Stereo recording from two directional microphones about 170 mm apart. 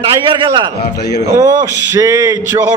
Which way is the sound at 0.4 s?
25° right (ahead or behind).